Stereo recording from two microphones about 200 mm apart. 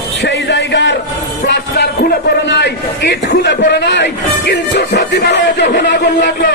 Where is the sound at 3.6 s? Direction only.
55° left (ahead or behind).